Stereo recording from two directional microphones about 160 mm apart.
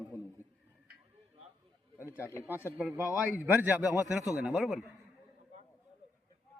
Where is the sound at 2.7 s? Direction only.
10° right (ahead or behind).